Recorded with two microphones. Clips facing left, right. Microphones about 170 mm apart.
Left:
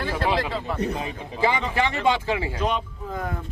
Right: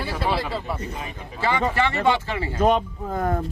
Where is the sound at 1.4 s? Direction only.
15° left (ahead or behind).